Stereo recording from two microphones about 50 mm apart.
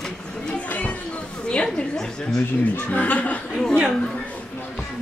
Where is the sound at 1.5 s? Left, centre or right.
Left.